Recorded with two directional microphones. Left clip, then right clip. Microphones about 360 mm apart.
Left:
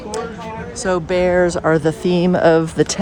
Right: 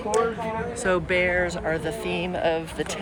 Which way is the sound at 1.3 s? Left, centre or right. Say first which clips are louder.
Left 9 dB; left.